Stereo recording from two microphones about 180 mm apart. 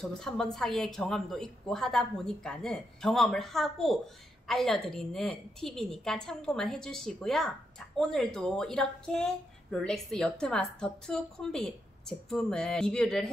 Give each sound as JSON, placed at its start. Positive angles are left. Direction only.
{"t": 0.2, "sound": "a woman's voice", "side_deg": 0}